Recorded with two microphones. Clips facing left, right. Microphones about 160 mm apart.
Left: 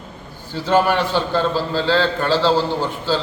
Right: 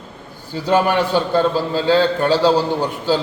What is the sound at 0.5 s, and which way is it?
A man's voice, 10° right (ahead or behind).